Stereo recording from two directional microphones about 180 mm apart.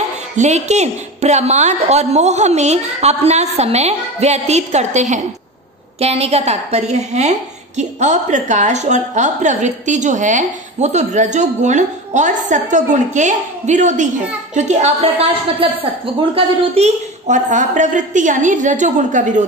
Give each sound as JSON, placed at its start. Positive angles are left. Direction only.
{"t": 0.4, "sound": "a woman's voice", "side_deg": -40}